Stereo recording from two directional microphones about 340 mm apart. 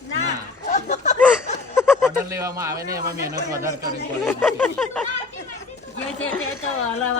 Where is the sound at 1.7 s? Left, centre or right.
Centre.